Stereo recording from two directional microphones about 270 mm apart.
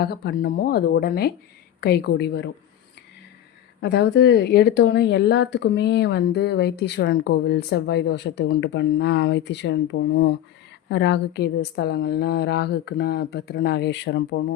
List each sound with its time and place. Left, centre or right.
0.0 s speech: left
3.8 s speech: left